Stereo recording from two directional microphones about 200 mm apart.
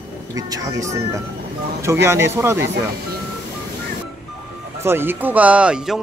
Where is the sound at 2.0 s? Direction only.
15° right (ahead or behind).